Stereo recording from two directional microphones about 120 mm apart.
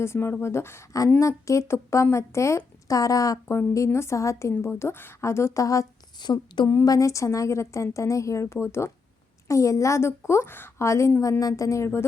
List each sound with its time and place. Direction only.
0.0 s a woman's voice: 20° left (ahead or behind)